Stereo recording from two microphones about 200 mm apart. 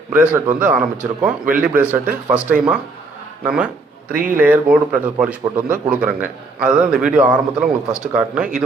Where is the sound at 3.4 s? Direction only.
5° right (ahead or behind).